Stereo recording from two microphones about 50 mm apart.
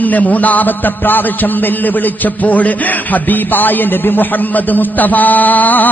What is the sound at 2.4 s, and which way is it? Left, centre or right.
A man's voice, left.